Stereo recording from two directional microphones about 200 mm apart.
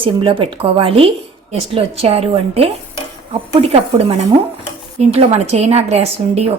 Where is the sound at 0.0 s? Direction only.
25° right (ahead or behind).